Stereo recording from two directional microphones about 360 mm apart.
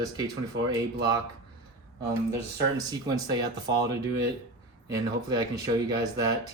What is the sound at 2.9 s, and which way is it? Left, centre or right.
Speech, centre.